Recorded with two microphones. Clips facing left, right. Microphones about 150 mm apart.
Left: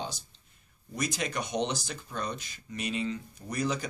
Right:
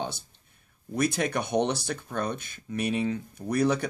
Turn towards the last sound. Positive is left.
turn(degrees=-60)  # may be behind; listen again after turning